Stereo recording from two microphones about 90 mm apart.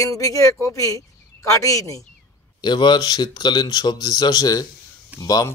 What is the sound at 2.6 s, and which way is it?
Speech, 55° left (ahead or behind).